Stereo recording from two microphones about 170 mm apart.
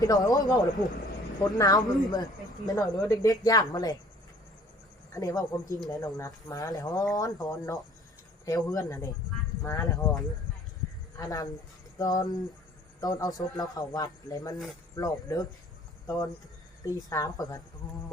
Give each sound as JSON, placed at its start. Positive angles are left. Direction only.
{"t": 0.0, "sound": "speech", "side_deg": 25}
{"t": 5.1, "sound": "speech", "side_deg": 20}
{"t": 11.2, "sound": "speech", "side_deg": 20}